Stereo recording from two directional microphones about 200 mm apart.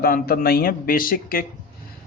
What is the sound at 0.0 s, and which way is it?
A man's voice, 50° left (ahead or behind).